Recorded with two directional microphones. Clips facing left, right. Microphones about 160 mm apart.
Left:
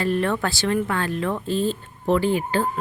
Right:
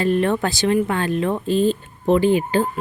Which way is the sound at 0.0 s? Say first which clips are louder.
Right 4 dB; 20° right (ahead or behind).